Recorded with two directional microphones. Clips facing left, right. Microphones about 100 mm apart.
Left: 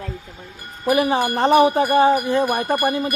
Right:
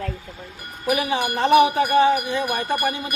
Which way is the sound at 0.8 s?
40° left (ahead or behind).